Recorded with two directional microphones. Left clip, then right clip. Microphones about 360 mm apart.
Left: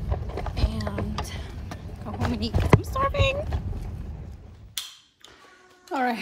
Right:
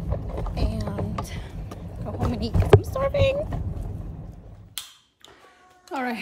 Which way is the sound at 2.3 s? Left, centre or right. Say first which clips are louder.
Right 5 dB; centre.